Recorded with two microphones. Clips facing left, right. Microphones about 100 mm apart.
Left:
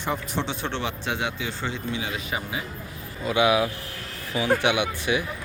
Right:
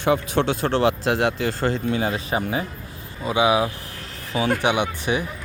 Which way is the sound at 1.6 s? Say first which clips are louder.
Right 8 dB; 45° right (ahead or behind).